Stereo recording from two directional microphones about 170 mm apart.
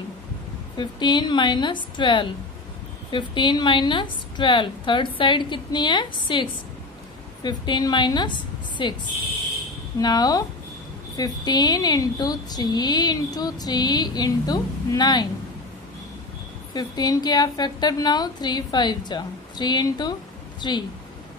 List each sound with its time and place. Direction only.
0.7 s a woman's voice: 25° left (ahead or behind)
9.9 s a woman's voice: 25° left (ahead or behind)
16.7 s a woman's voice: 25° left (ahead or behind)